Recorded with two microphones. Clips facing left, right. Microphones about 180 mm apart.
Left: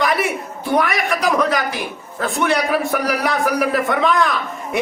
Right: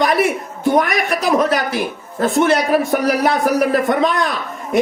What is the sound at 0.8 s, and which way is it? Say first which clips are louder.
A man's voice: right 2 dB; 40° right (ahead or behind).